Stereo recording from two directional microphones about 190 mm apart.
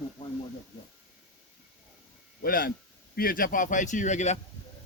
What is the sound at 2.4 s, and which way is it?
A man's voice, 50° left (ahead or behind).